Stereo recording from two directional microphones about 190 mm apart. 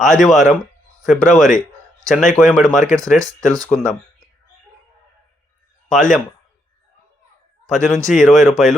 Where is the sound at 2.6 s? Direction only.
45° left (ahead or behind).